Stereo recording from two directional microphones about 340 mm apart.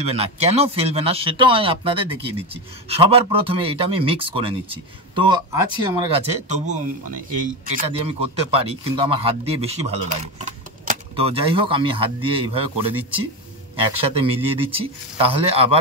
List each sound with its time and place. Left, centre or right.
0.0 s speech: centre
13.7 s speech: centre